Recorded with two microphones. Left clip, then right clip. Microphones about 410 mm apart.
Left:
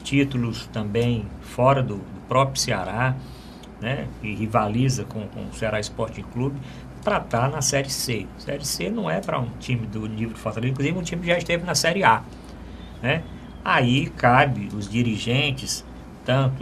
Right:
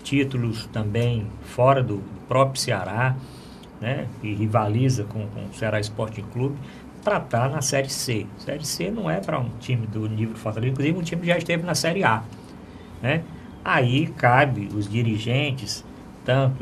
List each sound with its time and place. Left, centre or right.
0.0 s speech: right